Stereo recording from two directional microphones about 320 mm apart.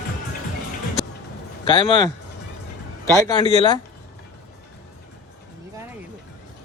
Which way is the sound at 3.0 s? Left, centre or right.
Centre.